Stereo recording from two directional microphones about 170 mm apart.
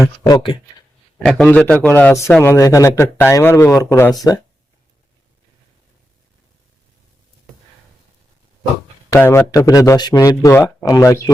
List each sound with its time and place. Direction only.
0.0 s speech: 20° left (ahead or behind)
1.2 s a man's voice: 5° left (ahead or behind)
9.1 s speech: 15° left (ahead or behind)